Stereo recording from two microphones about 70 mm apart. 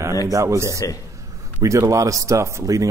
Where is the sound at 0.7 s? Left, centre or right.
Left.